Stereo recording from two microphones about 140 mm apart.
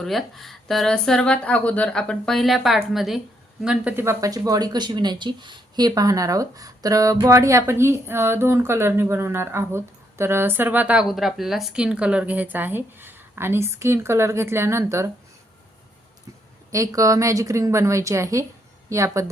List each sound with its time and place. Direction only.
0.0 s speech: centre (ahead or behind)
11.1 s speech: centre (ahead or behind); by 15.1 s 20° right (ahead or behind)
16.7 s speech: 25° right (ahead or behind)